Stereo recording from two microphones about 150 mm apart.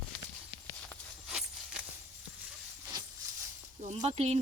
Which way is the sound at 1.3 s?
5° right (ahead or behind).